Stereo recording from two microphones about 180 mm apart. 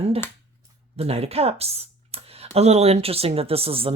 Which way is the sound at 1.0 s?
35° right (ahead or behind).